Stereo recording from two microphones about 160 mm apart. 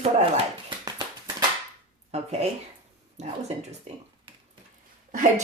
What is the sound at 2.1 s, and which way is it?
Speech, 45° right (ahead or behind).